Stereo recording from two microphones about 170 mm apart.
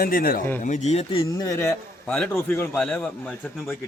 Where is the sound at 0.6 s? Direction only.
45° left (ahead or behind).